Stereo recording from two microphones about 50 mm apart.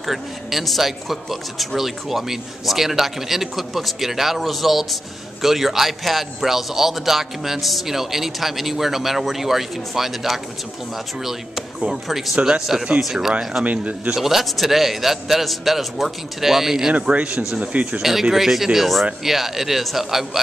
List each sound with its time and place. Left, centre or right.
0.0 s a man's voice: centre
12.4 s speech: centre
13.7 s speech: right
14.1 s a man's voice: centre
16.9 s speech: right
18.2 s a man's voice: centre